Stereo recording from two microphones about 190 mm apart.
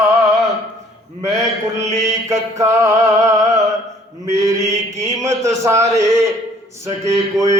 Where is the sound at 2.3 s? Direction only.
15° right (ahead or behind).